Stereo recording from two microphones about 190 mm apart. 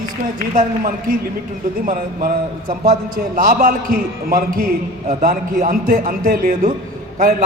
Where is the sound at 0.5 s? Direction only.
45° right (ahead or behind).